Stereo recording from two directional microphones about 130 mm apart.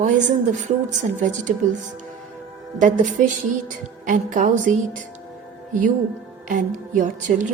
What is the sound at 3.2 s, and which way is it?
Music, 85° right.